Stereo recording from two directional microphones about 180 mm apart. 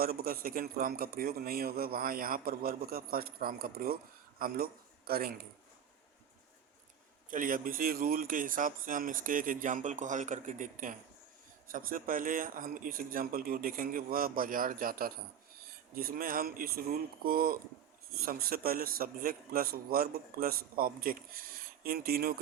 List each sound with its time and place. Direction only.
0.0 s a man's voice: 55° right (ahead or behind)
7.3 s a man's voice: 50° right (ahead or behind)